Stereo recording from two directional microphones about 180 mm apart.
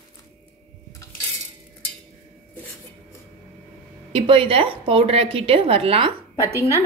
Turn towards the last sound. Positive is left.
turn(degrees=-15)  # may be behind; listen again after turning